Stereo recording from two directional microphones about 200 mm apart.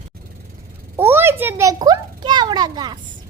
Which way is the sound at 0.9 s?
10° right (ahead or behind).